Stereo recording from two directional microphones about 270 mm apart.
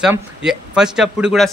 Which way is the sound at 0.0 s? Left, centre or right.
Centre.